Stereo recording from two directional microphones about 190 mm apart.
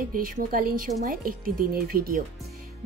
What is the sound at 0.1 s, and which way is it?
Speech, 50° right (ahead or behind).